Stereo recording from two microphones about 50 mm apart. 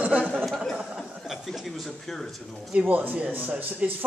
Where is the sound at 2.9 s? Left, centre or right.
Right.